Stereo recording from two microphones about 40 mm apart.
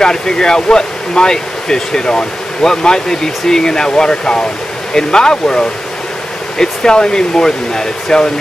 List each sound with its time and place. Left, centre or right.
0.0 s speech: centre